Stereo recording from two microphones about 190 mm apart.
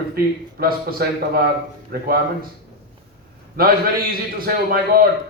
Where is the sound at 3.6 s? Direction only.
50° right (ahead or behind).